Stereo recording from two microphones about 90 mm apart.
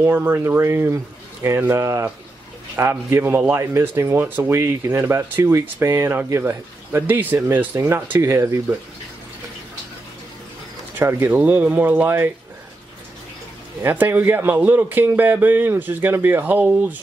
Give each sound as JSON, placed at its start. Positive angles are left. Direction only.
{"t": 0.0, "sound": "speech", "side_deg": -25}
{"t": 11.0, "sound": "speech", "side_deg": -25}
{"t": 13.8, "sound": "speech", "side_deg": -20}